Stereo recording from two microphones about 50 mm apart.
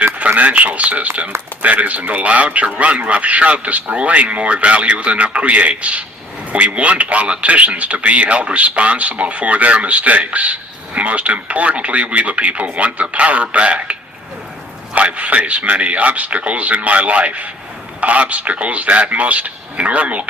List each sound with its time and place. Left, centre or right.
0.0 s a man's voice: right
14.9 s a man's voice: right